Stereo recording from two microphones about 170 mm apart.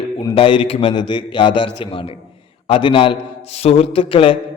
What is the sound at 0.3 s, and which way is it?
A man's voice, 30° left (ahead or behind).